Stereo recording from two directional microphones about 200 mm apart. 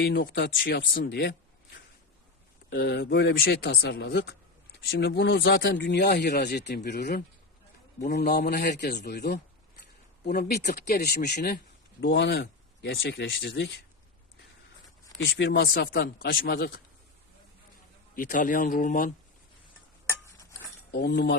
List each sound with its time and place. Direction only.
0.0 s speech: 55° left (ahead or behind)
2.6 s speech: 50° left (ahead or behind)
15.3 s speech: 60° left (ahead or behind)
18.1 s speech: 40° left (ahead or behind)
20.9 s speech: 50° left (ahead or behind)